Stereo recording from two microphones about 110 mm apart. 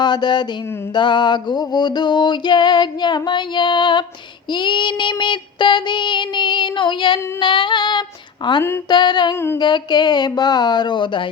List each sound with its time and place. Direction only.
0.0 s a sound: 40° left (ahead or behind)
0.9 s music: 45° left (ahead or behind)
7.3 s female singing: 45° left (ahead or behind)
8.4 s music: 45° left (ahead or behind)
9.6 s speech: 40° left (ahead or behind)